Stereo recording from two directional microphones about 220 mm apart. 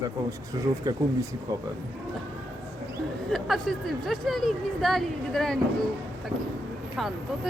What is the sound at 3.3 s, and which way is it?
A woman's voice, centre (ahead or behind).